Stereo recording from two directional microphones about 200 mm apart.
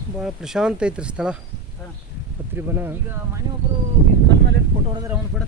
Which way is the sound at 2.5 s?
10° right (ahead or behind).